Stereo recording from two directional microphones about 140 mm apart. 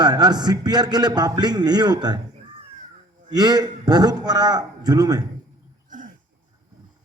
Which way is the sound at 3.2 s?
30° right (ahead or behind).